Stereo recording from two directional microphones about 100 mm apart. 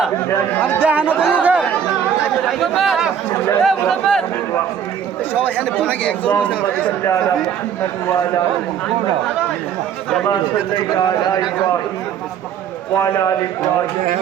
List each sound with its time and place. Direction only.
0.8 s speech: 15° right (ahead or behind)
2.5 s speech: centre (ahead or behind)
5.5 s speech: 20° left (ahead or behind)
10.9 s a man's voice: 40° left (ahead or behind)